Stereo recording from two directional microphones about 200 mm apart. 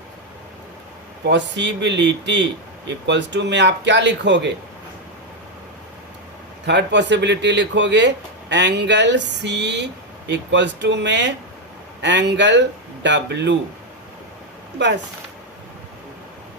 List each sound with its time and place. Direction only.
1.2 s speech: 60° right (ahead or behind)
6.7 s speech: 60° right (ahead or behind)
14.8 s speech: 60° right (ahead or behind)